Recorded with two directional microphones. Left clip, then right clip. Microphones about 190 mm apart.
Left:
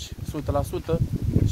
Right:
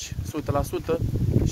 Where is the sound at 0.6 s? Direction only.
35° right (ahead or behind).